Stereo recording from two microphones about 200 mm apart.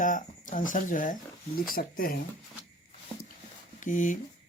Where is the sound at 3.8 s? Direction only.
40° left (ahead or behind).